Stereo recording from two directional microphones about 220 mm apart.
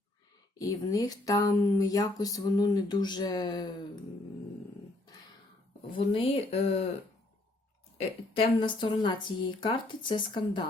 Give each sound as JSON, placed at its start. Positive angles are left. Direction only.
{"t": 0.6, "sound": "speech", "side_deg": 15}
{"t": 6.1, "sound": "speech", "side_deg": 25}
{"t": 8.4, "sound": "speech", "side_deg": 20}